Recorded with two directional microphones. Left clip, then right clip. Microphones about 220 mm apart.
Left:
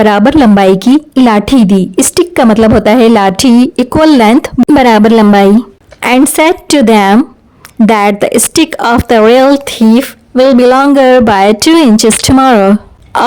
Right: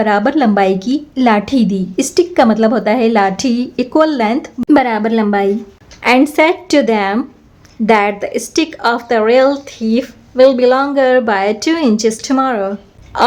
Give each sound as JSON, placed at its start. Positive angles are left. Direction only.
{"t": 0.0, "sound": "speech", "side_deg": 50}